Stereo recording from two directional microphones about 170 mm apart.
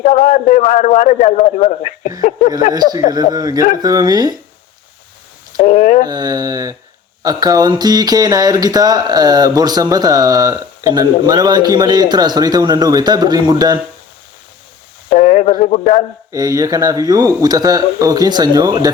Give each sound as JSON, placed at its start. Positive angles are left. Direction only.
{"t": 0.0, "sound": "a man's voice", "side_deg": 40}
{"t": 3.3, "sound": "speech", "side_deg": -20}
{"t": 5.6, "sound": "a sound", "side_deg": 45}
{"t": 6.1, "sound": "speech", "side_deg": -25}
{"t": 15.1, "sound": "speech", "side_deg": 50}
{"t": 16.3, "sound": "speech", "side_deg": -20}